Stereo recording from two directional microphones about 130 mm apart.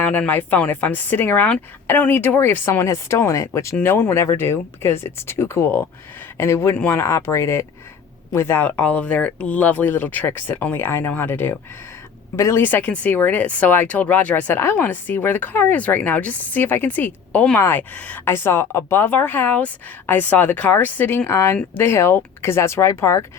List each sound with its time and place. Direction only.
0.0 s speech: 10° left (ahead or behind)